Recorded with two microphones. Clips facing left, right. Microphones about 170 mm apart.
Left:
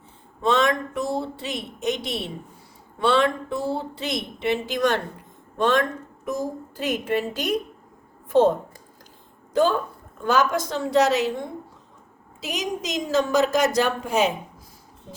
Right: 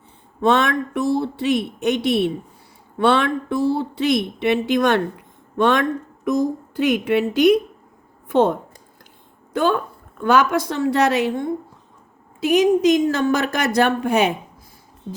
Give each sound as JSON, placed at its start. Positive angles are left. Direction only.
{"t": 0.4, "sound": "a woman's voice", "side_deg": -60}
{"t": 10.2, "sound": "speech", "side_deg": -60}
{"t": 12.4, "sound": "speech", "side_deg": -60}